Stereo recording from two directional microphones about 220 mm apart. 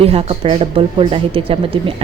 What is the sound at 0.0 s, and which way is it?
Speech, 25° right (ahead or behind).